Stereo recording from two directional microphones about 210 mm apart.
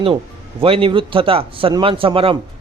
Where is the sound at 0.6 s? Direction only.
25° right (ahead or behind).